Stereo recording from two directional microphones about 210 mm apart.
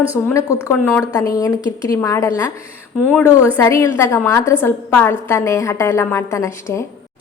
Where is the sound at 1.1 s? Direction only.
15° left (ahead or behind).